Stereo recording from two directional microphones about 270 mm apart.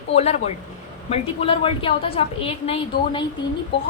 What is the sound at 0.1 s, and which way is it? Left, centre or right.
A woman's voice, left.